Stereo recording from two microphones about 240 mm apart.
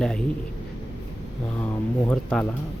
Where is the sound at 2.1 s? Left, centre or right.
Centre.